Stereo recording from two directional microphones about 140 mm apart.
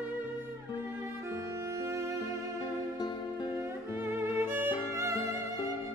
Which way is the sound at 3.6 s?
15° right (ahead or behind).